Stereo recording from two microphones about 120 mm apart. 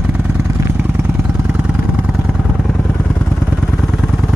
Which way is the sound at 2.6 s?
10° left (ahead or behind).